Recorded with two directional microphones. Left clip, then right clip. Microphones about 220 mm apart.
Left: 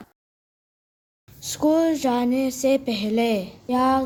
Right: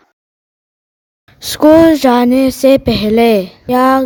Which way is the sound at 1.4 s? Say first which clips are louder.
Right 14 dB; 55° right (ahead or behind).